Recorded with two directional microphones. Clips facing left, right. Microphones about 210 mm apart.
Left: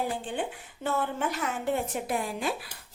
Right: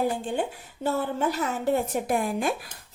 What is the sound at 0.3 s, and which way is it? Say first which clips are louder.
A woman's voice: right 4 dB; 40° right (ahead or behind).